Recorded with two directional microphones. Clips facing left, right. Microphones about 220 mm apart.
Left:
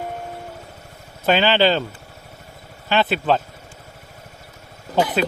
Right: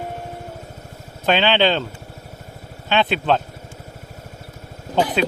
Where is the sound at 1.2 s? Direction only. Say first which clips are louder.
Left 1 dB; 5° left (ahead or behind).